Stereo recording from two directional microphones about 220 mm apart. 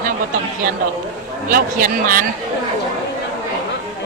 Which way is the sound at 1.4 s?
40° right (ahead or behind).